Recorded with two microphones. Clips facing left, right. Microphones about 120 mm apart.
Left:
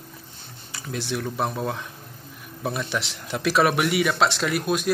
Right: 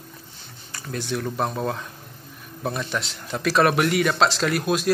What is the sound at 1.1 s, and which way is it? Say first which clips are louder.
Speech: right 1 dB; 10° left (ahead or behind).